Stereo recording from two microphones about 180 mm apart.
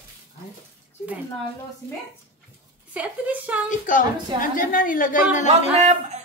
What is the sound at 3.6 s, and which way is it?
A woman's voice, 45° left (ahead or behind).